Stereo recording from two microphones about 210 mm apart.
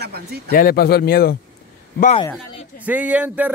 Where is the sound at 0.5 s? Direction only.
45° left (ahead or behind).